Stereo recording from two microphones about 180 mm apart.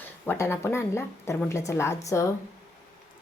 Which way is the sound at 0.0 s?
10° left (ahead or behind).